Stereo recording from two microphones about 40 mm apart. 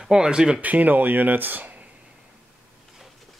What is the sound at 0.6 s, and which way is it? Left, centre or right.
Speech, right.